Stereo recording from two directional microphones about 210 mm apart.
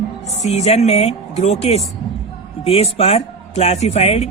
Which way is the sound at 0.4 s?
30° left (ahead or behind).